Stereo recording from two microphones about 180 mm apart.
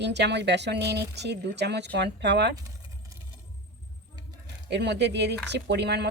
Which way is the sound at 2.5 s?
20° right (ahead or behind).